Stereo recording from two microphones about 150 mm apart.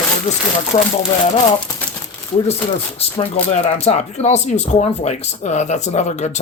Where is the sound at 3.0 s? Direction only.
40° left (ahead or behind).